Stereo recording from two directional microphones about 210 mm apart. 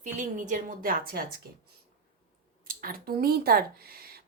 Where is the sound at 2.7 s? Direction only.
45° right (ahead or behind).